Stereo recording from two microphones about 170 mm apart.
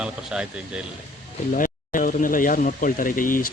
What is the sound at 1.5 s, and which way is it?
Speech, 55° left (ahead or behind).